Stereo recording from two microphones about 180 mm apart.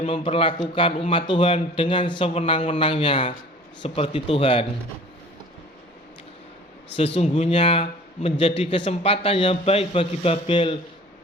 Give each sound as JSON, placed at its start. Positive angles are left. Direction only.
{"t": 0.0, "sound": "a man's voice", "side_deg": 30}
{"t": 7.2, "sound": "a man's voice", "side_deg": 35}